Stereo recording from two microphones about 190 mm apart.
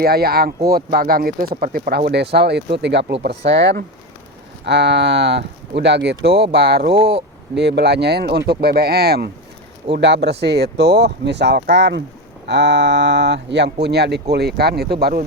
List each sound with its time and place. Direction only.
0.0 s speech: 55° right (ahead or behind)
6.9 s speech: 30° right (ahead or behind)
7.5 s speech: 65° right (ahead or behind)